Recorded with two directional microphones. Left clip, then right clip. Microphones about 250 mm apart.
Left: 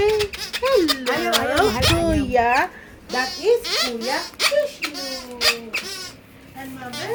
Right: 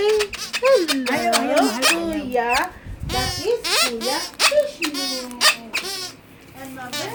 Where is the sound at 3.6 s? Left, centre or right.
Centre.